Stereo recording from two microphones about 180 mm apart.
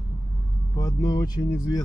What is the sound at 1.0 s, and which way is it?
Speech, 20° left (ahead or behind).